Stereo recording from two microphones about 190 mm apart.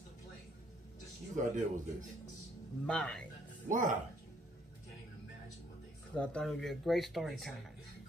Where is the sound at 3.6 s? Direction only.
40° right (ahead or behind).